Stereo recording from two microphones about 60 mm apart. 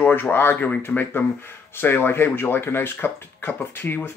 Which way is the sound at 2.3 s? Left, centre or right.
Left.